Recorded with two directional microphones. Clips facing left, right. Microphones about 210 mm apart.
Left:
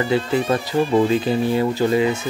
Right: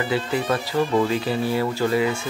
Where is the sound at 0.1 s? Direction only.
25° left (ahead or behind).